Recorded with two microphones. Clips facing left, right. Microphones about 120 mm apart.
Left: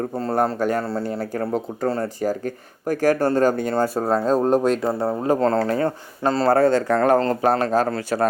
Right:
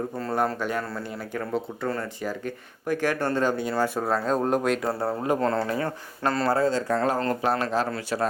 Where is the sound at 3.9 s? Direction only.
35° left (ahead or behind).